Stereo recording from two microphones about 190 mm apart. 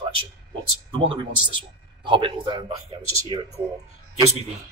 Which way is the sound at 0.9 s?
30° right (ahead or behind).